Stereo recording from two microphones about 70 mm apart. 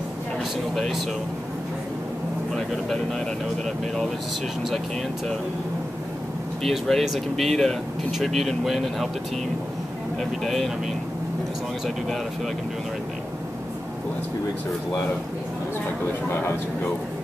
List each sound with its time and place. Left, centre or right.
0.7 s speech: centre
2.5 s speech: centre
6.6 s speech: centre
10.4 s speech: centre
16.3 s speech: left